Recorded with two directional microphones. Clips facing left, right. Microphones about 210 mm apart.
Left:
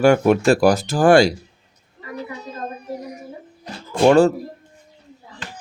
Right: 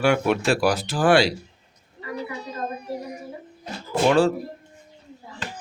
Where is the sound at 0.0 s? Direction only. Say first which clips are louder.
Left 6 dB; 45° left (ahead or behind).